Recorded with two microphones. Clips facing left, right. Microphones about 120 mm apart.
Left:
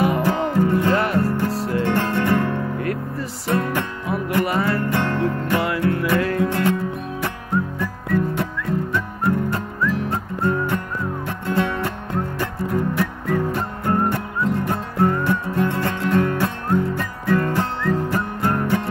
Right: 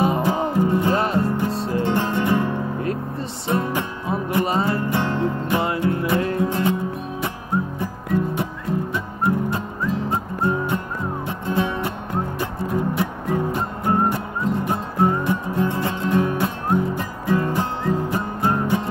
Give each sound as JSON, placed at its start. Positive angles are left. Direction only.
{"t": 0.0, "sound": "music", "side_deg": -20}